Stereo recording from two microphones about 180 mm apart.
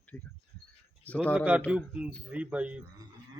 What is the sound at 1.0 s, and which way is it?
Speech, 5° left (ahead or behind).